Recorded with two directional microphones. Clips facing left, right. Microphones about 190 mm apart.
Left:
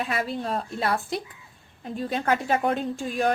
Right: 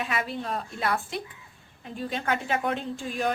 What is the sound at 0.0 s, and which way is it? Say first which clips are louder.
Speech: left 3 dB; 35° left (ahead or behind).